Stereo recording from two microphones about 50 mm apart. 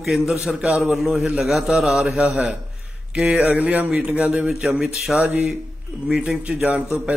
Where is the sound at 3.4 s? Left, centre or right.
Right.